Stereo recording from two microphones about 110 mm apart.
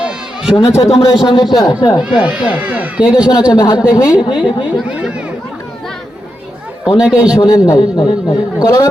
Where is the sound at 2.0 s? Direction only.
10° right (ahead or behind).